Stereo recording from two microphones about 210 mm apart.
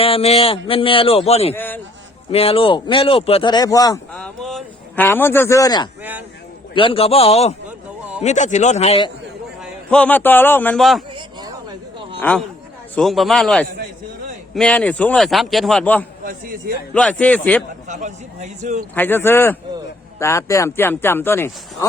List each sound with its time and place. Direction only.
0.0 s speech: 30° left (ahead or behind)
1.5 s a man's voice: 10° left (ahead or behind)
2.3 s speech: 30° left (ahead or behind)
4.1 s a man's voice: 5° left (ahead or behind); by 5.9 s 20° left (ahead or behind)
6.0 s a man's voice: 10° right (ahead or behind)
6.7 s speech: 25° left (ahead or behind)
9.6 s a man's voice: 5° left (ahead or behind)
11.1 s a sound: 20° right (ahead or behind)
12.2 s a man's voice: 10° left (ahead or behind)
16.2 s speech: 45° right (ahead or behind)
16.9 s a man's voice: 5° left (ahead or behind)
17.8 s a man's voice: 35° right (ahead or behind)
18.9 s speech: 10° left (ahead or behind)